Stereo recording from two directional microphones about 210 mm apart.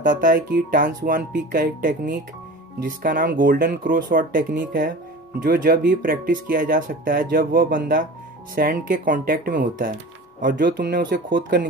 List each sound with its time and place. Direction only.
0.0 s speech: 40° right (ahead or behind)
10.6 s speech: 50° right (ahead or behind)